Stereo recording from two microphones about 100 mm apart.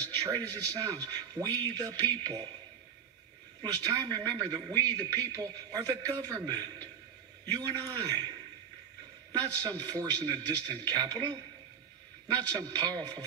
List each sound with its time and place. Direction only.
0.0 s a man's voice: 40° right (ahead or behind)
3.6 s a man's voice: 35° right (ahead or behind)
9.4 s a man's voice: 40° right (ahead or behind)